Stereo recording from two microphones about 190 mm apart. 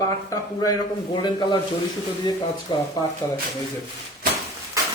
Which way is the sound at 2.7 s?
25° left (ahead or behind).